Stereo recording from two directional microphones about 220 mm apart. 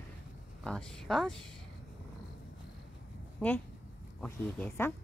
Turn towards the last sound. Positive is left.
turn(degrees=5)  # may be behind; listen again after turning